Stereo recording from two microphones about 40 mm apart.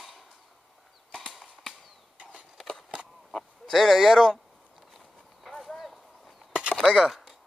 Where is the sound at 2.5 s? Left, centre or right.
Centre.